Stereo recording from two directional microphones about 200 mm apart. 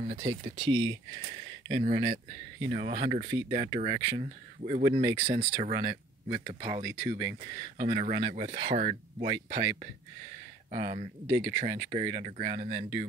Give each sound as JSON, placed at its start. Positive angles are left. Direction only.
{"t": 0.2, "sound": "speech", "side_deg": -25}
{"t": 1.9, "sound": "speech", "side_deg": -35}
{"t": 4.2, "sound": "speech", "side_deg": -35}
{"t": 9.3, "sound": "speech", "side_deg": -20}
{"t": 10.7, "sound": "speech", "side_deg": -30}